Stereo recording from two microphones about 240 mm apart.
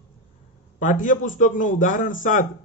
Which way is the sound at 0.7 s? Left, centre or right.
Left.